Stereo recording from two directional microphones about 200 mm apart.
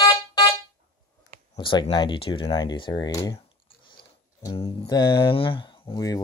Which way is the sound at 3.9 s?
25° left (ahead or behind).